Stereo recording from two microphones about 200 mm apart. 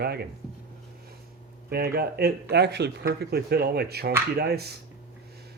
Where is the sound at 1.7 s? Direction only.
50° right (ahead or behind).